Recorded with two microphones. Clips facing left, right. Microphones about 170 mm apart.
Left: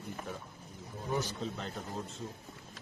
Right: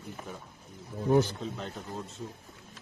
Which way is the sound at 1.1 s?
60° right (ahead or behind).